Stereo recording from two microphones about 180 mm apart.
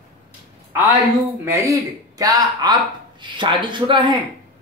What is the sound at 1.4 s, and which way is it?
Speech, 15° right (ahead or behind).